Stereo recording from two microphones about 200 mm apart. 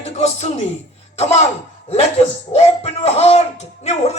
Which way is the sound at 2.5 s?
30° left (ahead or behind).